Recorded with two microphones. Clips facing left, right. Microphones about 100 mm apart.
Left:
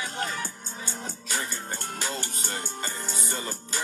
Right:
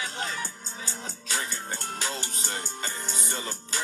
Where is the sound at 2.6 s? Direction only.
45° left (ahead or behind).